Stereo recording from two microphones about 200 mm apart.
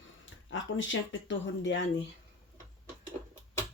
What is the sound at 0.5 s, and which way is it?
Speech, 70° left (ahead or behind).